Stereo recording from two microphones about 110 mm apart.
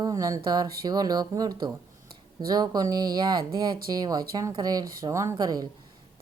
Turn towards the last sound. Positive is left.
turn(degrees=-35)  # may be behind; listen again after turning